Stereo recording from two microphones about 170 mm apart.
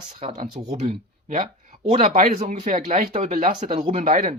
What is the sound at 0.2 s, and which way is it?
Speech, 45° right (ahead or behind).